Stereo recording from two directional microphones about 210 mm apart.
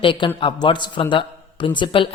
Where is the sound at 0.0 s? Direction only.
25° left (ahead or behind).